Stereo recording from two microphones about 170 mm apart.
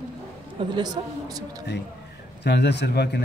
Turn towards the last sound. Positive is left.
turn(degrees=75)  # may be behind; listen again after turning